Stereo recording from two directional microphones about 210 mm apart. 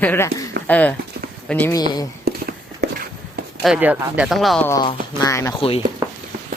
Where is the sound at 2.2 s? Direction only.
50° right (ahead or behind).